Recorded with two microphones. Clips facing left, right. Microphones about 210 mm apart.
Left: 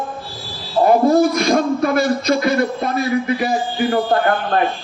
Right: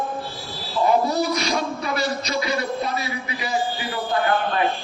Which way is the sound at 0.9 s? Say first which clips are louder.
Left 8 dB; 50° left (ahead or behind).